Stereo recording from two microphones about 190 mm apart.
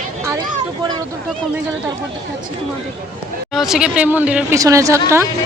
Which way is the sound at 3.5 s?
Centre (ahead or behind).